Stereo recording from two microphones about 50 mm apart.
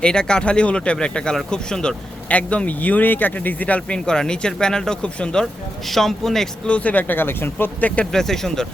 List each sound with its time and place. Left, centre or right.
0.0 s speech: centre
2.3 s speech: left
5.9 s speech: centre
6.7 s speech: left
7.2 s speech: left
7.8 s speech: left
8.1 s speech: centre